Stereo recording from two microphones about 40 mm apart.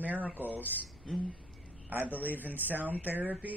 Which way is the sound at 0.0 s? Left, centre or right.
Right.